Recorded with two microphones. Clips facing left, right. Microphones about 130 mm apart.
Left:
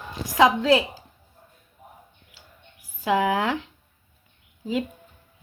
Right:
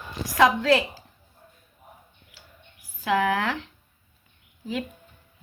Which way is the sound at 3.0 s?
15° left (ahead or behind).